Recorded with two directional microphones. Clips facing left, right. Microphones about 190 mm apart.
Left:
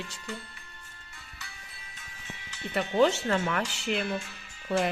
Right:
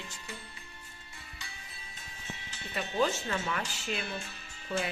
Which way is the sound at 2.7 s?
75° left (ahead or behind).